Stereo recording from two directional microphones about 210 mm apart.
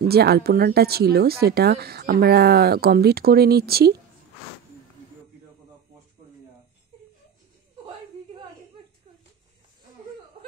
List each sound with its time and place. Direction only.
0.1 s speech: 50° right (ahead or behind)